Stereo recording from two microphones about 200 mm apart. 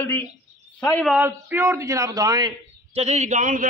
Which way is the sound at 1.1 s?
10° right (ahead or behind).